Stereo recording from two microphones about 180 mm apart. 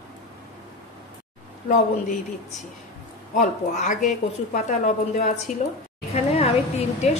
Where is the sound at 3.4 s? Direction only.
40° left (ahead or behind).